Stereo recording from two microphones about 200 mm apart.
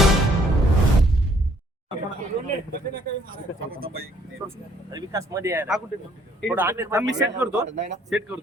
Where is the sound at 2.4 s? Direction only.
50° right (ahead or behind).